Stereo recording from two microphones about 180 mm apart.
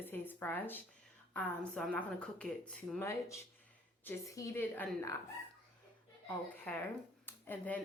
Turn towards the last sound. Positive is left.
turn(degrees=10)  # may be behind; listen again after turning